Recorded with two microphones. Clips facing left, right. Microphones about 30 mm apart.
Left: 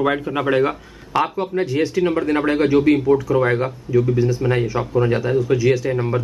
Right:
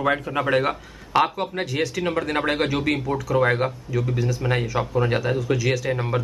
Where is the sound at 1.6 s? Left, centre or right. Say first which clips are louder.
Left 5 dB; centre.